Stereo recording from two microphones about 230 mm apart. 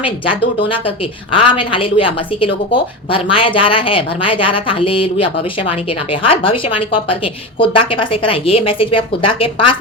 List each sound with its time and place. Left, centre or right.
0.0 s a woman's voice: left